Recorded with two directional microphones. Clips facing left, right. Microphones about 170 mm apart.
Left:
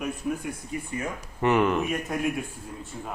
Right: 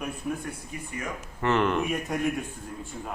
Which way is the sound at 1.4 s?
10° left (ahead or behind).